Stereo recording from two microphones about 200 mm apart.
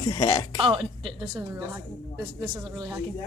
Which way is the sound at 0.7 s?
25° right (ahead or behind).